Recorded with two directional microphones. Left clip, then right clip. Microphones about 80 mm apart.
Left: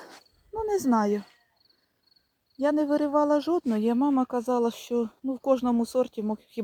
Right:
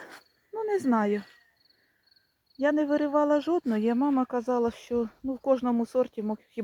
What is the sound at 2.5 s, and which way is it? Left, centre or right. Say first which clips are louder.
Speech: left 1 dB; centre.